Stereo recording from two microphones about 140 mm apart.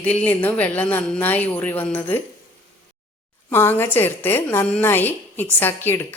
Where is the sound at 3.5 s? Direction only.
15° left (ahead or behind).